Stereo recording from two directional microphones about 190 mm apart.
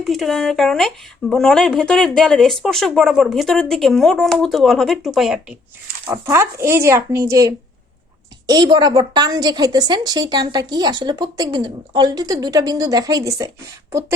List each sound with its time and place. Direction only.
0.0 s speech: centre (ahead or behind)
6.1 s a woman's voice: 15° right (ahead or behind)